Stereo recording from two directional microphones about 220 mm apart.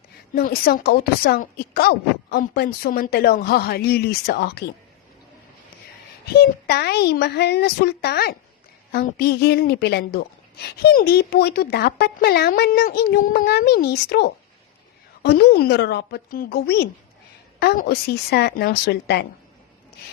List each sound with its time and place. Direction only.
0.3 s speech: 45° left (ahead or behind)
6.3 s speech: 45° left (ahead or behind)